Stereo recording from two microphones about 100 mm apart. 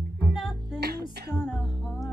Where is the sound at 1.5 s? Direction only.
5° right (ahead or behind).